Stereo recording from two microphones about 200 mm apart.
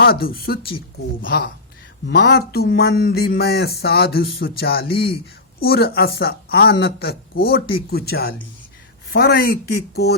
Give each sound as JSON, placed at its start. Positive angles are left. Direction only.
{"t": 0.0, "sound": "speech", "side_deg": 50}